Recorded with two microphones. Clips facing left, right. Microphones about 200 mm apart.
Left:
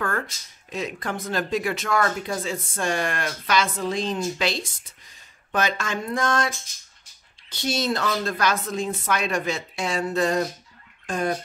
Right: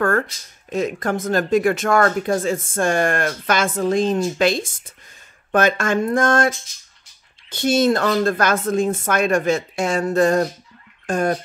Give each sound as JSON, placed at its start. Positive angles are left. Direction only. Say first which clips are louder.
{"t": 0.7, "sound": "speech", "louder": "right 8 dB", "side_deg": -50}